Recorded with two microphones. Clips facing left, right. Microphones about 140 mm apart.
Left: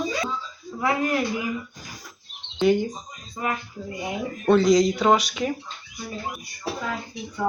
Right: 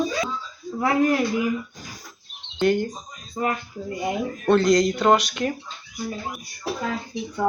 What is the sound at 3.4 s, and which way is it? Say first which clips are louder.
Speech: right 4 dB; 35° right (ahead or behind).